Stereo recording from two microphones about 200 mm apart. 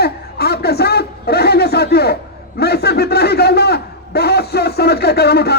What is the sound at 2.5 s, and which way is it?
A man's voice, 55° left (ahead or behind).